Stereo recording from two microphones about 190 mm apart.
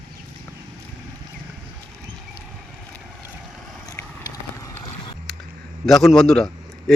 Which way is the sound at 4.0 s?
15° left (ahead or behind).